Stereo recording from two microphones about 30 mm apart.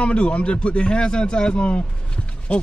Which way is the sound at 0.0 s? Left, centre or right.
Left.